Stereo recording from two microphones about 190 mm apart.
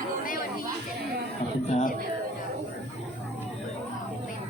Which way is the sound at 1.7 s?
35° left (ahead or behind).